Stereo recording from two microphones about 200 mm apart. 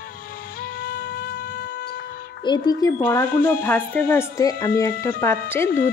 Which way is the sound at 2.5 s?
25° left (ahead or behind).